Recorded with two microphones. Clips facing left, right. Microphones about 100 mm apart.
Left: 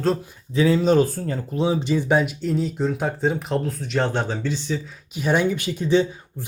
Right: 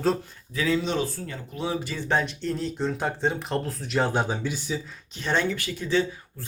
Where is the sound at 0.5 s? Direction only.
30° left (ahead or behind).